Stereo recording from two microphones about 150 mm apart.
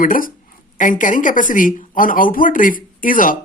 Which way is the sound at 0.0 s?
65° left (ahead or behind).